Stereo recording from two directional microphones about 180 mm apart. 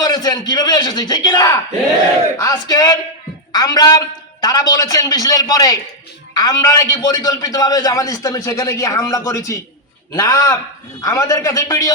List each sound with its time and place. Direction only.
0.0 s a man's voice: 20° left (ahead or behind)